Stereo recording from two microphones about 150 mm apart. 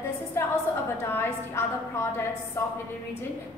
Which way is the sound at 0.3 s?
15° left (ahead or behind).